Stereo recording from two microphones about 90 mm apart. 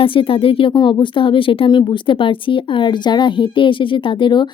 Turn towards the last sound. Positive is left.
turn(degrees=65)  # may be behind; listen again after turning